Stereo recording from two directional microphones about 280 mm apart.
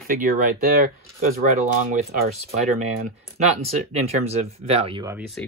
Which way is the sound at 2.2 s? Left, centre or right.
Right.